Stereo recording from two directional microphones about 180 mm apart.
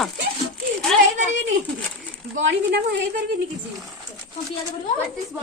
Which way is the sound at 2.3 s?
85° right.